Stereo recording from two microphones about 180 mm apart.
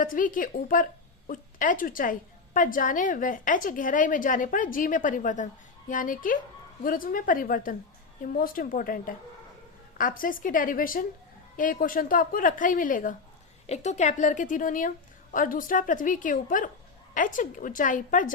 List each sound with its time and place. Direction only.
0.0 s a woman's voice: 50° left (ahead or behind)